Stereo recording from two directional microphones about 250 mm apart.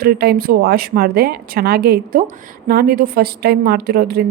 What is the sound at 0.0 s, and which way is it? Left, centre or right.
Speech, right.